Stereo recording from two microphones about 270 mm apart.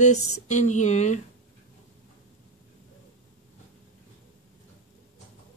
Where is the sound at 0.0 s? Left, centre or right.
Left.